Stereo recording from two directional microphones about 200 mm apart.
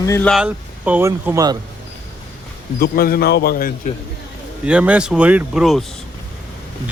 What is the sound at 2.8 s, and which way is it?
Speech, 50° left (ahead or behind).